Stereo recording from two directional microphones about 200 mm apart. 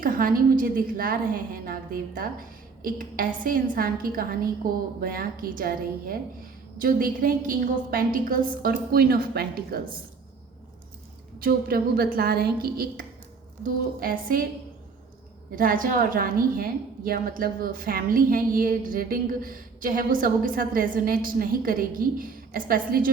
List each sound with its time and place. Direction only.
0.0 s a woman's voice: 45° right (ahead or behind)
11.3 s a woman's voice: 50° right (ahead or behind)
15.5 s a woman's voice: 45° right (ahead or behind)